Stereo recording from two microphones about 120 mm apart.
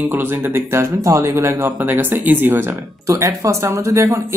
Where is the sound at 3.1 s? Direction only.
25° right (ahead or behind).